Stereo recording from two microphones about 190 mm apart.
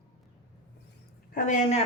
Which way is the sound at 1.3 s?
40° left (ahead or behind).